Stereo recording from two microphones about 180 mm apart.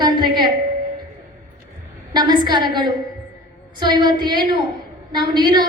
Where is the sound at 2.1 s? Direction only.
25° right (ahead or behind).